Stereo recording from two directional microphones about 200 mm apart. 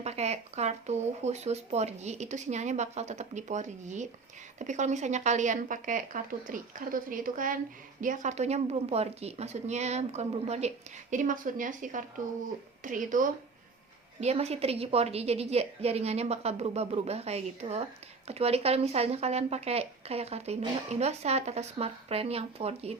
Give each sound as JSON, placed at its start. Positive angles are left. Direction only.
{"t": 0.0, "sound": "speech", "side_deg": -35}